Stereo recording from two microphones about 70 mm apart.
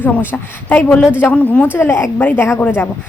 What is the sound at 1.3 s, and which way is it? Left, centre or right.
A woman's voice, centre.